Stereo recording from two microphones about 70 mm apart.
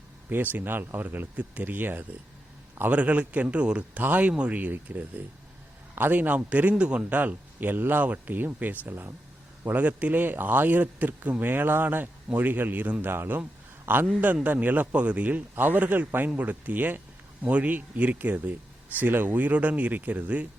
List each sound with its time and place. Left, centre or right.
0.5 s a man's voice: right
9.6 s a man's voice: right